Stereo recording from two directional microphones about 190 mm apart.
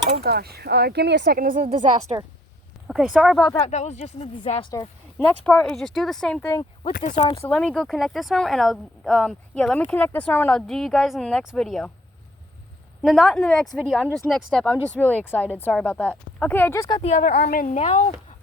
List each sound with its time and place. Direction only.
0.2 s speech: 55° right (ahead or behind)
2.1 s speech: 30° right (ahead or behind)
2.8 s speech: centre (ahead or behind)
3.6 s speech: 35° left (ahead or behind)
5.2 s speech: 5° left (ahead or behind)
6.9 s speech: 40° left (ahead or behind)
7.4 s speech: 5° left (ahead or behind)
13.0 s speech: centre (ahead or behind); by 17.0 s 15° left (ahead or behind)
17.0 s a woman's voice: 40° left (ahead or behind)
17.7 s speech: 35° left (ahead or behind)